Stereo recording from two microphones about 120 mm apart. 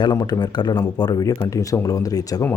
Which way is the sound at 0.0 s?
35° left (ahead or behind).